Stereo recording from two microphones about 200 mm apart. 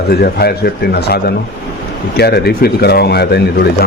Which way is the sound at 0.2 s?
50° left (ahead or behind).